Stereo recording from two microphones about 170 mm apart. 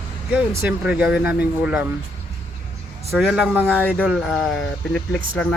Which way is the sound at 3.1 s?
Centre (ahead or behind).